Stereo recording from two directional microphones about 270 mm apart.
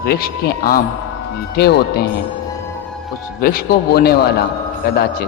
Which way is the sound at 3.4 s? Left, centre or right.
Left.